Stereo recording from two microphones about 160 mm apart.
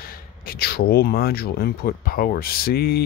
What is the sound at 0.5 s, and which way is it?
Speech, 80° left.